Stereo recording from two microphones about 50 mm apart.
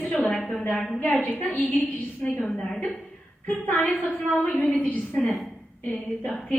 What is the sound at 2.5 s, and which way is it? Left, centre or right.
Speech, centre.